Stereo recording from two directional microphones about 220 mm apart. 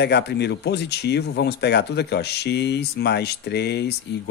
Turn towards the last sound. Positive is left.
turn(degrees=50)  # may be behind; listen again after turning